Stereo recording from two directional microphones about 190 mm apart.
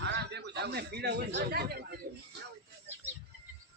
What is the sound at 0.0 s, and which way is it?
A man's voice, 65° right (ahead or behind).